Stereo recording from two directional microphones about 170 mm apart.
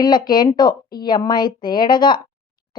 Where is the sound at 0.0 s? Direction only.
25° left (ahead or behind).